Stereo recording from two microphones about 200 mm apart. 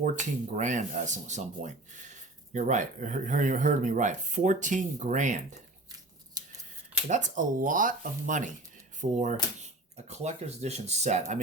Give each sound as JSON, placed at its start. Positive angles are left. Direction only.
{"t": 0.0, "sound": "speech", "side_deg": -40}
{"t": 7.1, "sound": "speech", "side_deg": -40}